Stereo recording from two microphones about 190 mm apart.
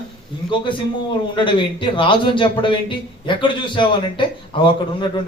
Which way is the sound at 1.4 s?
25° left (ahead or behind).